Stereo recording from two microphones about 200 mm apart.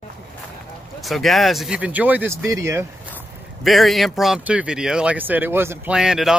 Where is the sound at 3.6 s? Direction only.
Centre (ahead or behind).